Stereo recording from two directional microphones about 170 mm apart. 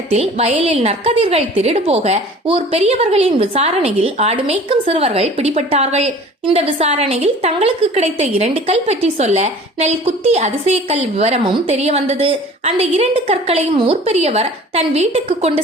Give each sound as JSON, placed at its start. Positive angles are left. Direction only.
{"t": 0.1, "sound": "a woman's voice", "side_deg": -40}